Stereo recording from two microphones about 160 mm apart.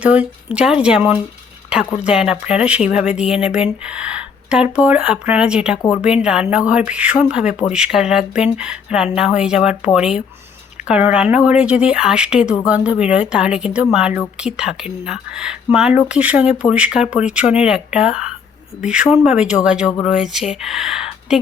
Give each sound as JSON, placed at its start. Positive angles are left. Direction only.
{"t": 0.0, "sound": "speech", "side_deg": -10}